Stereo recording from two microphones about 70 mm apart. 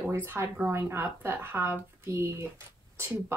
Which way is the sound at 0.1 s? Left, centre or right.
Right.